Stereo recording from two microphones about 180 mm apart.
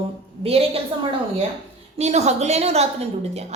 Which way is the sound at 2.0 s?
40° right (ahead or behind).